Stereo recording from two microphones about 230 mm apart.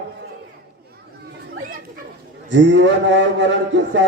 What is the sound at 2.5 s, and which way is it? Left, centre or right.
A man's voice, right.